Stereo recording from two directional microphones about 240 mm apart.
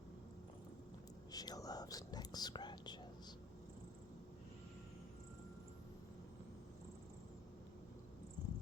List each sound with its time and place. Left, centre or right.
1.3 s speech: centre